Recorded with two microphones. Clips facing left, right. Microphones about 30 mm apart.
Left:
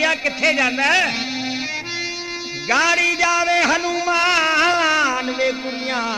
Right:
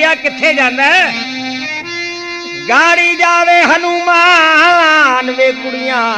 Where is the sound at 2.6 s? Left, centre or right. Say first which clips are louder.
Right 8 dB; right.